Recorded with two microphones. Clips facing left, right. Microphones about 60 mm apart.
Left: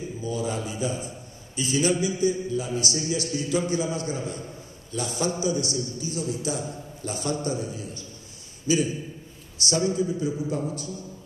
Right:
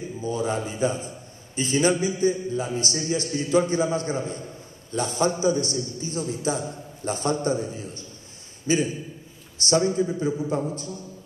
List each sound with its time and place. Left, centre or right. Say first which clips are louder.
0.2 s a man's voice: right 3 dB; right